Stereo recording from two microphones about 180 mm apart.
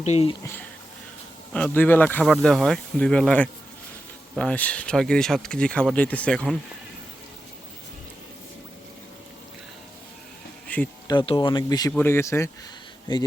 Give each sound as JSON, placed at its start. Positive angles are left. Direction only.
{"t": 0.0, "sound": "speech", "side_deg": 35}
{"t": 1.5, "sound": "speech", "side_deg": 10}
{"t": 10.7, "sound": "speech", "side_deg": 10}
{"t": 11.1, "sound": "speech", "side_deg": 25}